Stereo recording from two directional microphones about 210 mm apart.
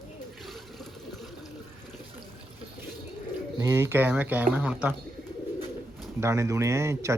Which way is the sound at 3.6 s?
10° right (ahead or behind).